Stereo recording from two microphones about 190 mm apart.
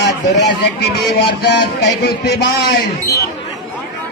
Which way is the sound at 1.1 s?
60° left (ahead or behind).